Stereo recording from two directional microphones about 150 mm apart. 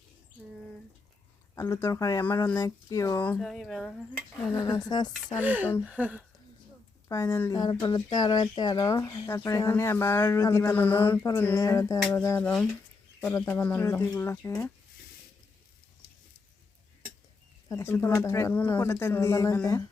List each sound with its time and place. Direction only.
1.5 s speech: 20° left (ahead or behind)
3.2 s speech: centre (ahead or behind)
4.7 s speech: 30° left (ahead or behind)
5.4 s a sound: 10° right (ahead or behind)
7.1 s speech: 20° left (ahead or behind)
12.4 s speech: 5° left (ahead or behind)
13.2 s speech: 20° left (ahead or behind)
17.7 s speech: 20° left (ahead or behind)